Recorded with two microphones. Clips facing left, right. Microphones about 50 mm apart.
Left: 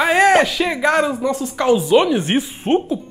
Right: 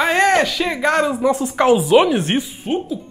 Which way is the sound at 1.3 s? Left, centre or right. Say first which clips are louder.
Right 4 dB; right.